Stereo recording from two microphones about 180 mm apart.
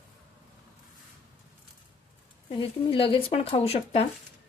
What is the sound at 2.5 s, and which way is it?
Speech, 30° left (ahead or behind).